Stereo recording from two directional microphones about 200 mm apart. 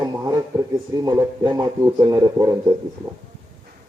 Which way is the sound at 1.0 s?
20° right (ahead or behind).